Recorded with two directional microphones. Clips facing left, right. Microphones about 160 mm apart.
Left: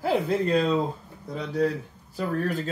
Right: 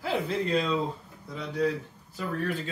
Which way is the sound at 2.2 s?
40° left (ahead or behind).